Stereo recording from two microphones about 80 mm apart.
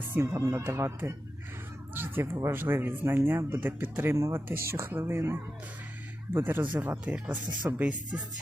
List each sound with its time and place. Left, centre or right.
0.1 s speech: right; by 8.2 s centre